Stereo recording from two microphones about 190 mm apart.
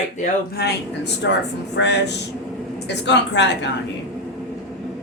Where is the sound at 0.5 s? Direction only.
60° left (ahead or behind).